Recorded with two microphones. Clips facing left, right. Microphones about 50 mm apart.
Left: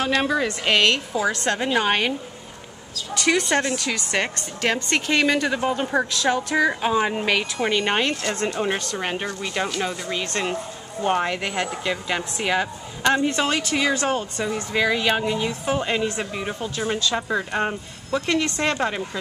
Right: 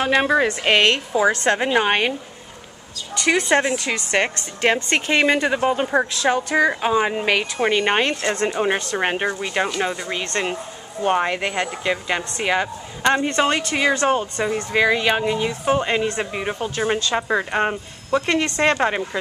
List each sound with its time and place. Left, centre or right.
0.0 s speech: centre
1.7 s a woman's voice: centre
3.2 s a woman's voice: centre
8.4 s a woman's voice: centre
8.9 s a woman's voice: right; by 12.6 s centre
13.0 s a woman's voice: right